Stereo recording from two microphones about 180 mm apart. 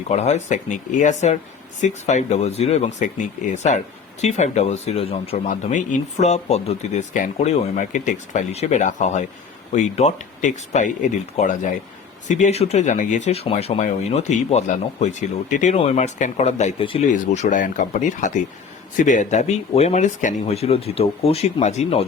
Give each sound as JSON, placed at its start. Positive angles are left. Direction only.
{"t": 0.1, "sound": "speech", "side_deg": 40}